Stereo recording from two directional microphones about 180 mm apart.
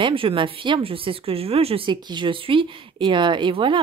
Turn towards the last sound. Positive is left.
turn(degrees=-30)  # may be behind; listen again after turning